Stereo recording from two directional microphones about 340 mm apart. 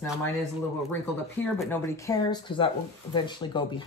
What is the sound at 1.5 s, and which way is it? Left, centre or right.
A woman's voice, centre.